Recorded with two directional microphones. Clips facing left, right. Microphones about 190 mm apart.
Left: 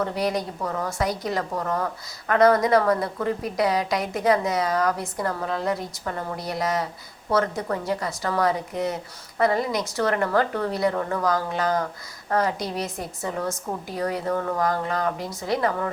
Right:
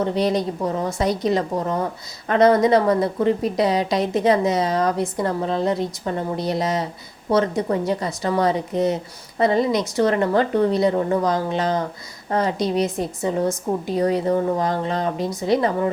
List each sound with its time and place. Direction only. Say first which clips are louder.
0.0 s a woman's voice: right 5 dB; 25° right (ahead or behind)